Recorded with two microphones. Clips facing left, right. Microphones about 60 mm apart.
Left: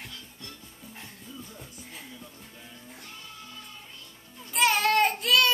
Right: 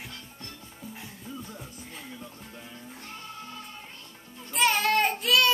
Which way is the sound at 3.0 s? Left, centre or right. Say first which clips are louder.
Right 6 dB; right.